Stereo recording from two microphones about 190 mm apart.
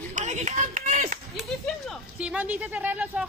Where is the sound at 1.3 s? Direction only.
Centre (ahead or behind).